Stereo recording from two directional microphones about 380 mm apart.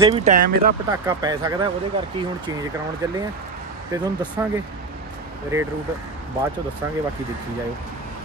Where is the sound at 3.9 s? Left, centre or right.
Centre.